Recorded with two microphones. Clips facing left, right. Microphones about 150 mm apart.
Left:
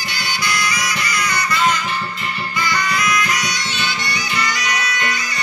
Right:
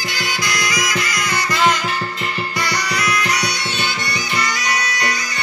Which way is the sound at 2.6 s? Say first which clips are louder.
Left 3 dB; 70° right (ahead or behind).